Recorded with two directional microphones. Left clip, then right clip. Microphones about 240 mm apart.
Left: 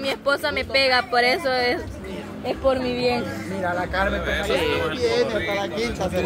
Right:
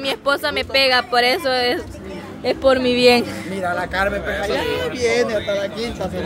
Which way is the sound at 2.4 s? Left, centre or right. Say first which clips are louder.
Right 6 dB; right.